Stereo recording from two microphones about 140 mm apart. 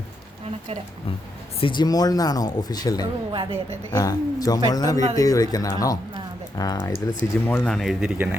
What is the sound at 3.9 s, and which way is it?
Speech, 25° left (ahead or behind).